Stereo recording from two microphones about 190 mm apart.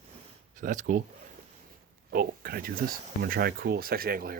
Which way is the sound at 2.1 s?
50° right (ahead or behind).